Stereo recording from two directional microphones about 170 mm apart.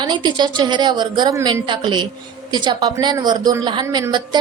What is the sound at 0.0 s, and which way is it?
A woman's voice, 25° right (ahead or behind).